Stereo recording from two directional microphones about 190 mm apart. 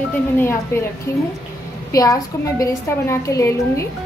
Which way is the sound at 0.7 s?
15° left (ahead or behind).